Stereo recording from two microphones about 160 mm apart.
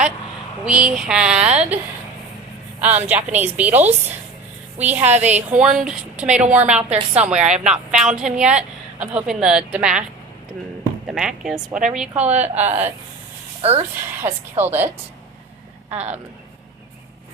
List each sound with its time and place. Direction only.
0.6 s speech: 5° right (ahead or behind)
2.8 s speech: 10° right (ahead or behind)
11.1 s speech: centre (ahead or behind)
12.1 s a woman's voice: 45° right (ahead or behind)
13.6 s speech: 40° right (ahead or behind)
13.9 s speech: 15° right (ahead or behind)
15.9 s a woman's voice: 45° right (ahead or behind)